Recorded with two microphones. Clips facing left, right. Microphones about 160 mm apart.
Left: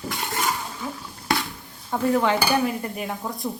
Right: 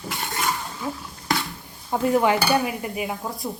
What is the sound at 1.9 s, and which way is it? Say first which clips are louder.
Speech: right 1 dB; 15° right (ahead or behind).